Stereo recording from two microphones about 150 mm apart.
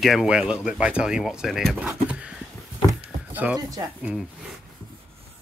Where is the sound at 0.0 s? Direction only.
Centre (ahead or behind).